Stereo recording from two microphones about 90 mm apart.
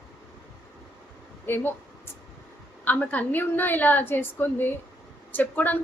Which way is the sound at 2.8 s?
20° left (ahead or behind).